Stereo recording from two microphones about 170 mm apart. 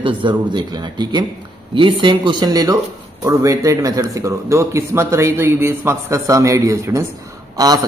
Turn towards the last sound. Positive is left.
turn(degrees=-20)  # may be behind; listen again after turning